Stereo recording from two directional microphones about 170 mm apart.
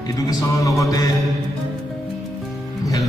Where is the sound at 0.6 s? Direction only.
20° left (ahead or behind).